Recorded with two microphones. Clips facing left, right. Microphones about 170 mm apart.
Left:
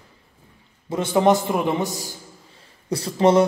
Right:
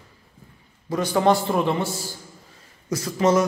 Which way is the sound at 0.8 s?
25° left (ahead or behind).